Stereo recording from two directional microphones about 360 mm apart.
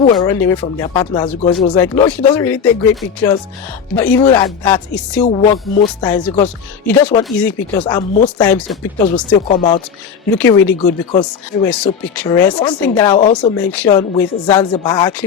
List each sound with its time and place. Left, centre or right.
0.0 s speech: centre
5.2 s speech: centre
8.4 s speech: centre
9.5 s speech: centre
10.3 s speech: centre